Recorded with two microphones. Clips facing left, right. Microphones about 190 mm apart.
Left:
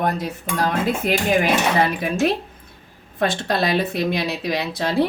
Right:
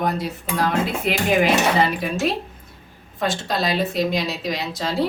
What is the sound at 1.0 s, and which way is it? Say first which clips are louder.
Dishes: right 1 dB; 50° left (ahead or behind).